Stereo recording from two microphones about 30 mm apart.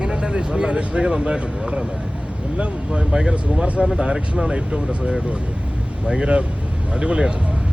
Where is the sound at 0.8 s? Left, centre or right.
Right.